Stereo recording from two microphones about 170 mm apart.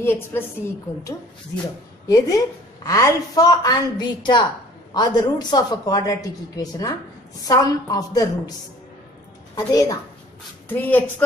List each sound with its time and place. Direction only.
0.0 s a woman's voice: 15° left (ahead or behind)
2.0 s a woman's voice: 20° left (ahead or behind)
9.7 s a woman's voice: 20° left (ahead or behind)
10.7 s a woman's voice: 10° left (ahead or behind)